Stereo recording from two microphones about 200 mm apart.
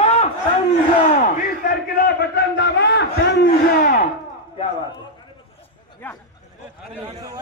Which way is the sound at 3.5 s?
45° left (ahead or behind).